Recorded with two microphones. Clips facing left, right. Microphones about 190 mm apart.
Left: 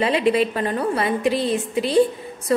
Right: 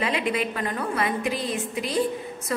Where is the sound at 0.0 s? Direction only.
30° left (ahead or behind).